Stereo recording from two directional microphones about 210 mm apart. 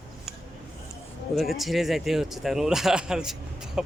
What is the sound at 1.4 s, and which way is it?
Speech, centre (ahead or behind).